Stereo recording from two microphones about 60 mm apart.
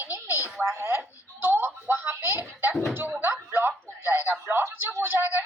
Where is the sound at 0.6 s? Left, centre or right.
Right.